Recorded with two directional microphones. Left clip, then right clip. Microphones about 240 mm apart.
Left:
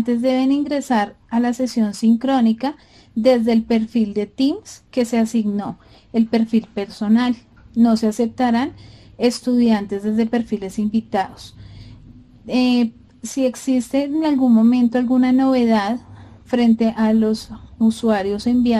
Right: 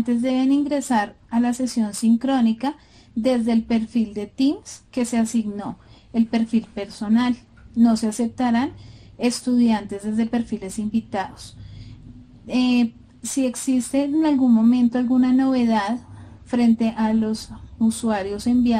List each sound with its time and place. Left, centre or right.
0.0 s a woman's voice: left
12.4 s a woman's voice: left